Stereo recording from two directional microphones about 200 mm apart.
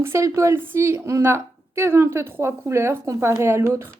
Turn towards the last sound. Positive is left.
turn(degrees=-15)  # may be behind; listen again after turning